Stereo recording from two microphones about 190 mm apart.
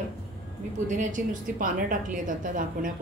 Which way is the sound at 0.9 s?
40° right (ahead or behind).